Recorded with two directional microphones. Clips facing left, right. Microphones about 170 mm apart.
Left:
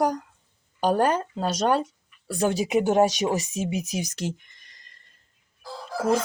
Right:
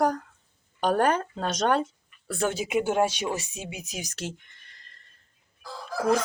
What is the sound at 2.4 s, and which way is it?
Speech, 40° left (ahead or behind).